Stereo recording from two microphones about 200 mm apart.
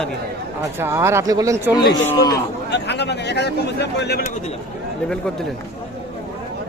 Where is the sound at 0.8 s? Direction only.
15° right (ahead or behind).